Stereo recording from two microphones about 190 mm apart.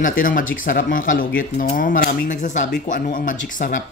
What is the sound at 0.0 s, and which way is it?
Speech, 45° left (ahead or behind).